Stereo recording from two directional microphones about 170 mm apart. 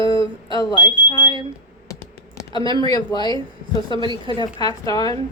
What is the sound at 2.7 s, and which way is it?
Speech, 25° left (ahead or behind).